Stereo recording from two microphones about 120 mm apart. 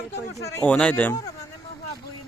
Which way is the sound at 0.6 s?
10° left (ahead or behind).